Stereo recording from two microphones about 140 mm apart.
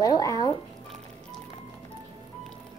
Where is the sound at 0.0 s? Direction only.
25° left (ahead or behind).